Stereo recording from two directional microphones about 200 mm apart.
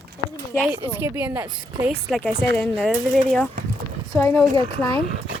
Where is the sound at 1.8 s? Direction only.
5° left (ahead or behind).